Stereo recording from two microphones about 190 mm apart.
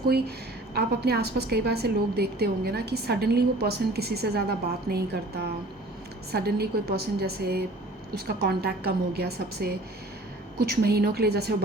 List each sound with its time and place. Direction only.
0.8 s a woman's voice: 55° right (ahead or behind)